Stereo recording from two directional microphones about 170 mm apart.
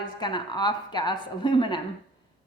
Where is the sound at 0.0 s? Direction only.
25° left (ahead or behind).